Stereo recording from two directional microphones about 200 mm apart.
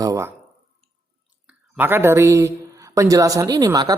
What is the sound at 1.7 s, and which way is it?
A man's voice, 10° right (ahead or behind).